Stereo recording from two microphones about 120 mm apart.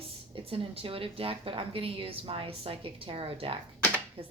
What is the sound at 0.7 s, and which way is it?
Speech, 50° right (ahead or behind).